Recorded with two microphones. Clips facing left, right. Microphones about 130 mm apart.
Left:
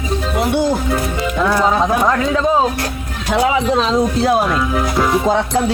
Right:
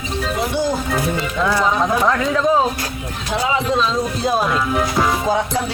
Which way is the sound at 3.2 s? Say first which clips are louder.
Left 5 dB; 75° left (ahead or behind).